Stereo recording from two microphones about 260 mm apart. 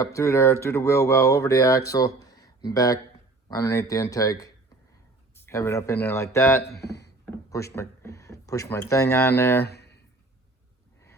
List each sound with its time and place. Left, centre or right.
0.0 s speech: centre
2.2 s a sound: centre
2.6 s speech: centre
6.6 s speech: left
7.5 s speech: centre
9.6 s a sound: left